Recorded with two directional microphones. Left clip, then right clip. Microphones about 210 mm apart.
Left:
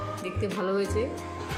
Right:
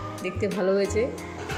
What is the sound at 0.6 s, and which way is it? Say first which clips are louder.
Speech: right 5 dB; 10° right (ahead or behind).